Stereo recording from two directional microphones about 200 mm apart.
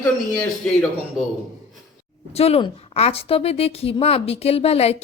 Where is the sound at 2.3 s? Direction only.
30° left (ahead or behind).